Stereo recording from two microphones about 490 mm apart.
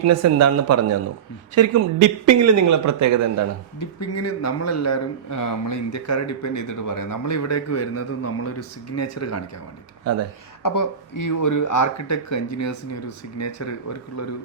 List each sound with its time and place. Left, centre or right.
0.0 s a man's voice: right
3.8 s speech: left
10.6 s speech: left